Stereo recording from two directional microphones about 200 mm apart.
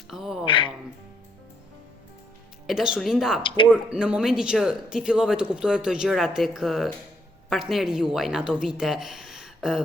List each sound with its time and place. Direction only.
0.1 s speech: centre (ahead or behind)
0.4 s speech: 25° left (ahead or behind)
2.6 s speech: 5° right (ahead or behind)